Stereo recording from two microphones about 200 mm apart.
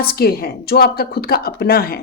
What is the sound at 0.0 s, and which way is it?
Speech, 50° left (ahead or behind).